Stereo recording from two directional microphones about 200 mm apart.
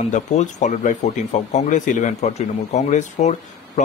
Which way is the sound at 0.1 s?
35° left (ahead or behind).